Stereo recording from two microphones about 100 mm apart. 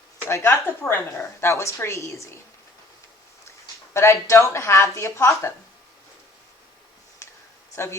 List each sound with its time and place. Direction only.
0.3 s a woman's voice: 25° left (ahead or behind)
3.9 s a woman's voice: 30° left (ahead or behind)